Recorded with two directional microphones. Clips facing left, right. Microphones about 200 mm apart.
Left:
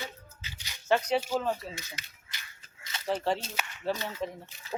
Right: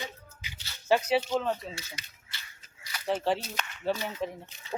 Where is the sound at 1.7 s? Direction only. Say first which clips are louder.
Even; 15° left (ahead or behind).